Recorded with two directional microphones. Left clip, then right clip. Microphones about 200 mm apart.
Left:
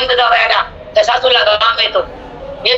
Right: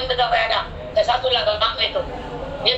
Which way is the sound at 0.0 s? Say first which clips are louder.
Left 8 dB; 45° left (ahead or behind).